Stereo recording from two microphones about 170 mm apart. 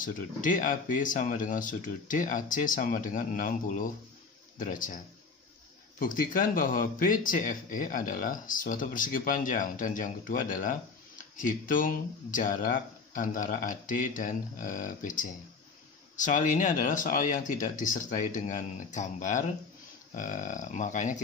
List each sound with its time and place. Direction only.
0.0 s speech: 50° left (ahead or behind)